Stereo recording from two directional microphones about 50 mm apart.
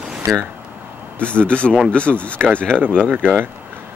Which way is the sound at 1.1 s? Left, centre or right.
Left.